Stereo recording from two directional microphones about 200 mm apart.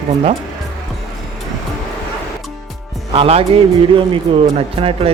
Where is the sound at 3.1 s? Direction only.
30° right (ahead or behind).